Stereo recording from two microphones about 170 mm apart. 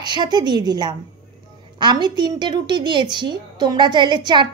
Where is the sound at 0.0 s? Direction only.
25° right (ahead or behind).